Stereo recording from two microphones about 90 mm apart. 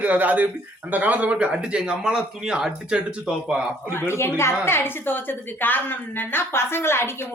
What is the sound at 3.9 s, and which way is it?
A woman's voice, 30° left (ahead or behind).